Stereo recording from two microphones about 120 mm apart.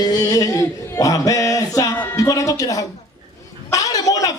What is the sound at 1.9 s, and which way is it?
Music, 15° left (ahead or behind).